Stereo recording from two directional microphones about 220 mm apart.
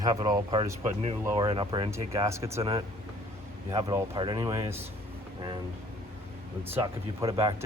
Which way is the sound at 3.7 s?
20° right (ahead or behind).